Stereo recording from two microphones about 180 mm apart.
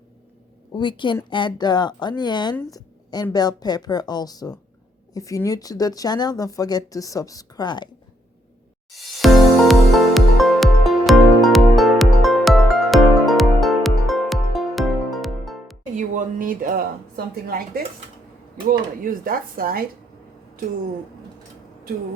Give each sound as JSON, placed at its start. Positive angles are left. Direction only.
{"t": 0.7, "sound": "speech", "side_deg": 25}
{"t": 2.7, "sound": "a sound", "side_deg": 20}
{"t": 3.3, "sound": "speech", "side_deg": 20}
{"t": 8.9, "sound": "music", "side_deg": 0}
{"t": 16.0, "sound": "speech", "side_deg": -45}
{"t": 18.7, "sound": "speech", "side_deg": -50}